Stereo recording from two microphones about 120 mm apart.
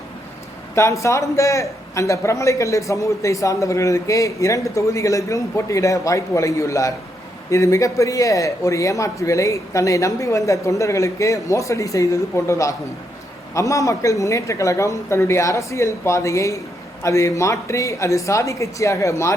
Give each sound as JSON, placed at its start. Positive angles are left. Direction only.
{"t": 0.8, "sound": "a man's voice", "side_deg": 25}